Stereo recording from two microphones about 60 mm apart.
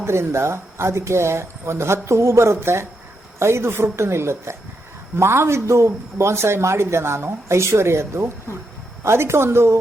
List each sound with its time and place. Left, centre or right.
0.0 s speech: right